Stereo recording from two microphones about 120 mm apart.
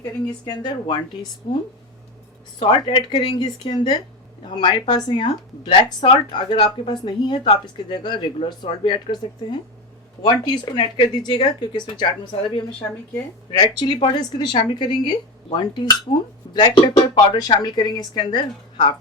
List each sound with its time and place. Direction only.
0.4 s speech: 35° left (ahead or behind)
2.6 s speech: 45° left (ahead or behind)
13.7 s speech: 40° left (ahead or behind)